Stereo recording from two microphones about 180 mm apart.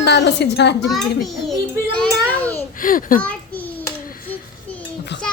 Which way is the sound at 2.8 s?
50° left (ahead or behind).